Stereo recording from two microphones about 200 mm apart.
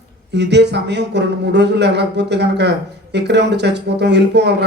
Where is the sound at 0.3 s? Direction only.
60° right (ahead or behind).